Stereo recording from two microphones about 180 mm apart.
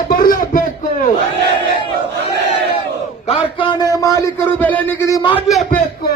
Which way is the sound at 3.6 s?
20° left (ahead or behind).